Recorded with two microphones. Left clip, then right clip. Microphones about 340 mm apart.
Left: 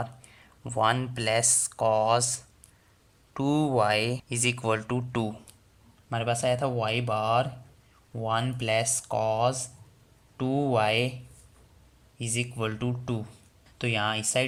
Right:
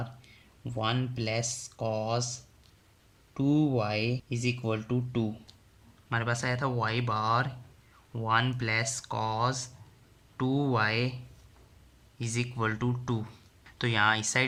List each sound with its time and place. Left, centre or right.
0.8 s speech: left
6.1 s speech: centre
12.2 s speech: centre